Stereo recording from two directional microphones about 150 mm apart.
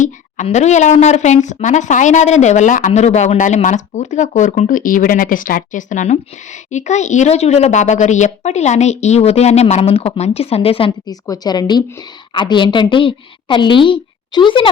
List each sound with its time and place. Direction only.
0.4 s speech: 50° left (ahead or behind)
11.1 s a woman's voice: 25° left (ahead or behind)